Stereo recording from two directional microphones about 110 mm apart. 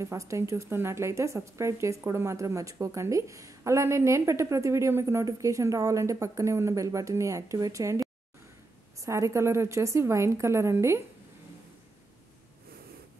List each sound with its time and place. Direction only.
0.0 s a woman's voice: 30° right (ahead or behind)